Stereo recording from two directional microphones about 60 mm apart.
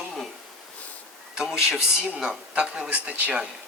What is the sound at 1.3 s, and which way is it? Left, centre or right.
Speech, centre.